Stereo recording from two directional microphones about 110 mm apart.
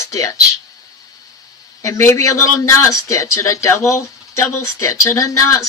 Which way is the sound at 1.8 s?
30° left (ahead or behind).